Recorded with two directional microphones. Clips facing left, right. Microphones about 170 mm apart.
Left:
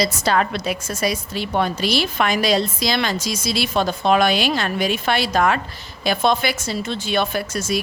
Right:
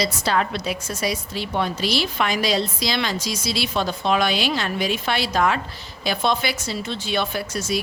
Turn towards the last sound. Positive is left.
turn(degrees=50)  # may be behind; listen again after turning